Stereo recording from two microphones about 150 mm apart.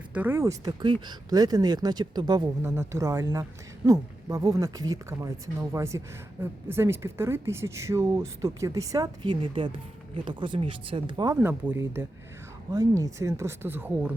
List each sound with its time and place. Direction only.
0.1 s speech: 10° right (ahead or behind); by 11.3 s 30° right (ahead or behind)
11.3 s speech: 10° right (ahead or behind)